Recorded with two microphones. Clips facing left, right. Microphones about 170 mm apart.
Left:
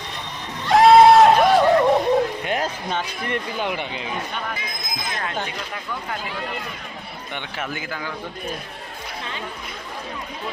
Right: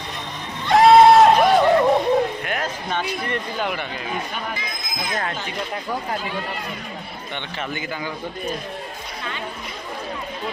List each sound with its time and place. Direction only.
0.7 s a sound: centre (ahead or behind)
3.2 s speech: 15° left (ahead or behind)
7.3 s a man's voice: 5° left (ahead or behind)